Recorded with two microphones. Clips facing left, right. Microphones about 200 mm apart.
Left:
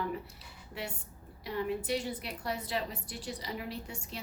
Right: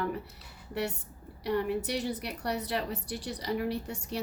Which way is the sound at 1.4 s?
70° right (ahead or behind).